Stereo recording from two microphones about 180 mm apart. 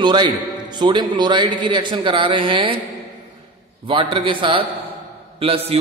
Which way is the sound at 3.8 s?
30° right (ahead or behind).